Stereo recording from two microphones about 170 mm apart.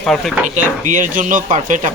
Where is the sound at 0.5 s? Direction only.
45° right (ahead or behind).